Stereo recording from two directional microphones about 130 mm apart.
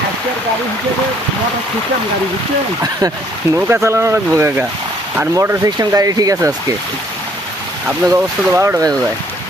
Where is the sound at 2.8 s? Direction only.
25° right (ahead or behind).